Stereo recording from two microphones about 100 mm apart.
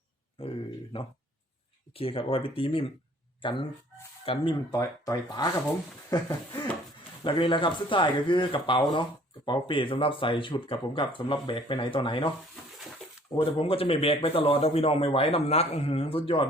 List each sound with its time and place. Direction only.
0.9 s speech: 65° left (ahead or behind)
3.4 s speech: 55° left (ahead or behind)
4.7 s speech: 35° left (ahead or behind); by 12.3 s 60° left (ahead or behind)
13.3 s a man's voice: 65° left (ahead or behind)